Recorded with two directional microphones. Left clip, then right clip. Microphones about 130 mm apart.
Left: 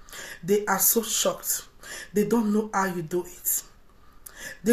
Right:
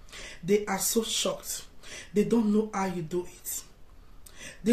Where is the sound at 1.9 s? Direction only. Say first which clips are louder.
Left 2 dB; 15° right (ahead or behind).